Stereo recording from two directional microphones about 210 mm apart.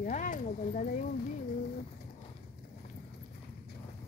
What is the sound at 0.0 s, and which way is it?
Speech, 40° left (ahead or behind).